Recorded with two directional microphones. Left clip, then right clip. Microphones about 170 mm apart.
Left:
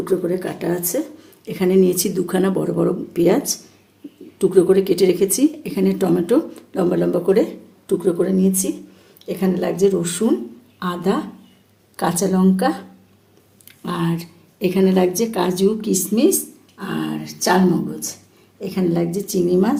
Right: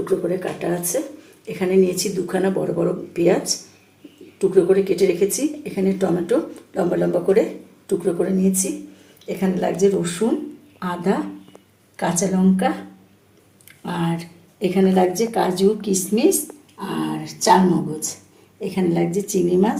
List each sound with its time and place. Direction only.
0.3 s speech: 70° left (ahead or behind); by 12.7 s 45° left (ahead or behind)
13.8 s speech: 60° left (ahead or behind); by 17.6 s 45° left (ahead or behind)
18.6 s speech: 50° left (ahead or behind)